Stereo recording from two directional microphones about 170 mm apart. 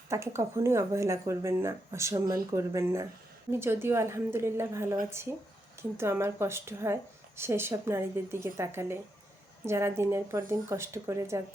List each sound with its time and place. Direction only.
0.1 s speech: 15° right (ahead or behind)
6.0 s speech: 15° right (ahead or behind)